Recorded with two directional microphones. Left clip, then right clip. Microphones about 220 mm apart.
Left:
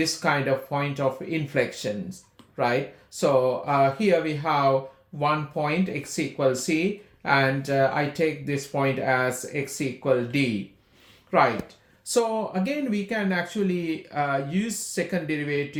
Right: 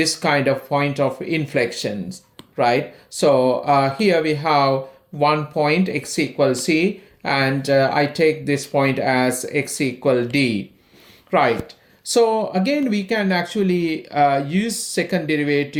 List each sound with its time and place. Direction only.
0.0 s speech: 40° right (ahead or behind)
3.2 s speech: 40° right (ahead or behind)